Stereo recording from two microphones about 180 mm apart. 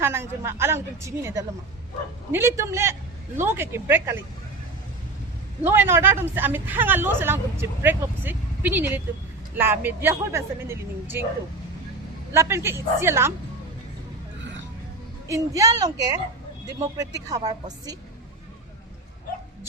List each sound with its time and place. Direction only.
0.0 s speech: 15° right (ahead or behind)
5.6 s speech: 10° right (ahead or behind)
12.3 s speech: 15° right (ahead or behind)
15.3 s a woman's voice: 20° right (ahead or behind)